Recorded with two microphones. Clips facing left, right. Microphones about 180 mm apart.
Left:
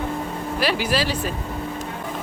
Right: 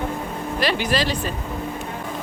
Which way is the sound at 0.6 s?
10° left (ahead or behind).